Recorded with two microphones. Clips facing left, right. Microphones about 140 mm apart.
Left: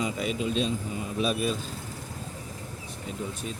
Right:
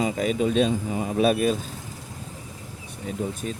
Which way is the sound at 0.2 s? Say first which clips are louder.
Right 6 dB; 45° right (ahead or behind).